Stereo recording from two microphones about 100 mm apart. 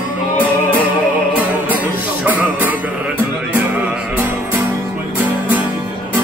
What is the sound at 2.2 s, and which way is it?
Music, 15° right (ahead or behind).